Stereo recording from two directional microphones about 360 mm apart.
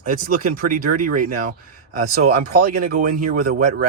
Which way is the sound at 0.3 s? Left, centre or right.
Right.